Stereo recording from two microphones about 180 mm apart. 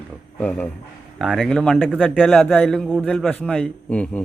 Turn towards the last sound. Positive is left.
turn(degrees=5)  # may be behind; listen again after turning